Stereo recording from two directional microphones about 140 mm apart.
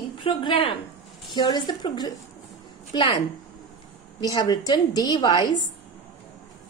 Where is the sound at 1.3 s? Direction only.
30° left (ahead or behind).